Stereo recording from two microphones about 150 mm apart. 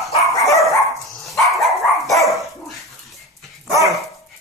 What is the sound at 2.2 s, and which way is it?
Dog, centre (ahead or behind).